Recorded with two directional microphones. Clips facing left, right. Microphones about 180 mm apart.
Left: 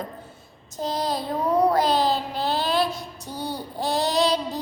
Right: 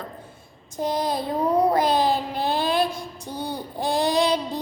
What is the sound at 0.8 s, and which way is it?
Child singing, 15° right (ahead or behind).